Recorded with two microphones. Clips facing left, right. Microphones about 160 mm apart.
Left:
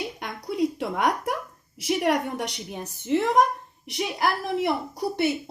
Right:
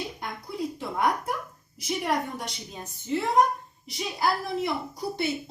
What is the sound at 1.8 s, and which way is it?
A woman's voice, 75° left (ahead or behind).